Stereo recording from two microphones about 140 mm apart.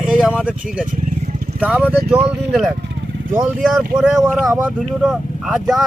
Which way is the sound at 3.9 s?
5° right (ahead or behind).